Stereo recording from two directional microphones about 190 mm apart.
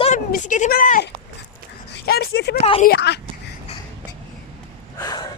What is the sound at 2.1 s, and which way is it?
Speech, 55° left (ahead or behind).